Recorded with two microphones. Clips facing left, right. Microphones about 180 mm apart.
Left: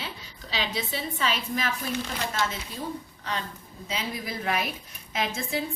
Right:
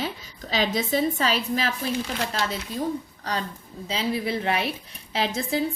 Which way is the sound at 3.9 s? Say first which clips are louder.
Right 7 dB; 30° right (ahead or behind).